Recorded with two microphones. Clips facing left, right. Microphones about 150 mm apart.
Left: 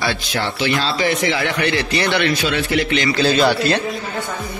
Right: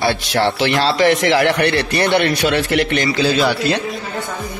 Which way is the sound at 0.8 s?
70° right (ahead or behind).